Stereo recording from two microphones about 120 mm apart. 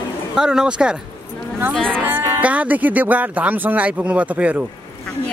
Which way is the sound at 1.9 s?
15° right (ahead or behind).